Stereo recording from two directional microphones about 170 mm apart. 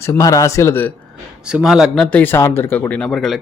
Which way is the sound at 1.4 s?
5° right (ahead or behind).